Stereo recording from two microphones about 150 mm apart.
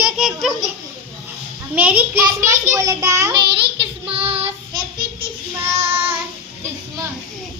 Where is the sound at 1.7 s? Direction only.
10° right (ahead or behind).